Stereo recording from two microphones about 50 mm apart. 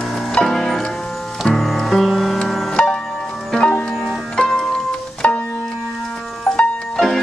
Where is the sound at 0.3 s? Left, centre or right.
Centre.